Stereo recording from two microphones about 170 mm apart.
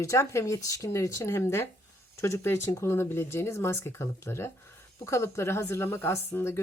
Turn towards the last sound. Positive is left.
turn(degrees=15)  # may be behind; listen again after turning